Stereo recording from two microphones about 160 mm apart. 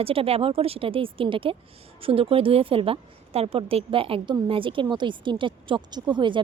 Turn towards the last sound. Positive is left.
turn(degrees=-30)  # may be behind; listen again after turning